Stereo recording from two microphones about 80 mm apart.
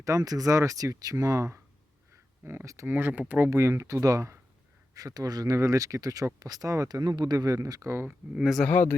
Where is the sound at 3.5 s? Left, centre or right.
Right.